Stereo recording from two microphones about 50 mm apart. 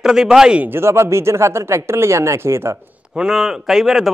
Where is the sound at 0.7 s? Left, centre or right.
Right.